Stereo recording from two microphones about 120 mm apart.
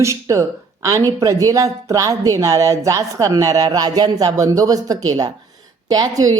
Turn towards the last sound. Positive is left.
turn(degrees=-30)  # may be behind; listen again after turning